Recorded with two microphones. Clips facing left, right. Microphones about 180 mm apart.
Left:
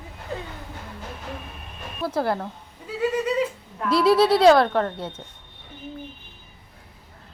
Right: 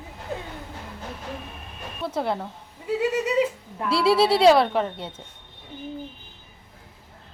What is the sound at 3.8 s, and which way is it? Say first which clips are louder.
Speech: left 2 dB; 30° right (ahead or behind).